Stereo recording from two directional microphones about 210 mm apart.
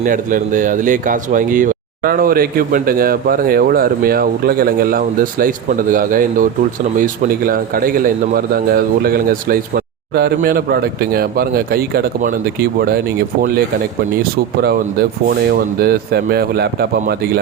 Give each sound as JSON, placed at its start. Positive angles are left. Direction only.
{"t": 0.0, "sound": "speech", "side_deg": -40}
{"t": 14.2, "sound": "speech", "side_deg": -45}